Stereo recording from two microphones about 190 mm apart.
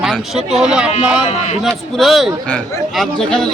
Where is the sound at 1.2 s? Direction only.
35° left (ahead or behind).